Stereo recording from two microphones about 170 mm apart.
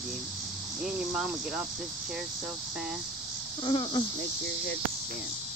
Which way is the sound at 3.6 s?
30° left (ahead or behind).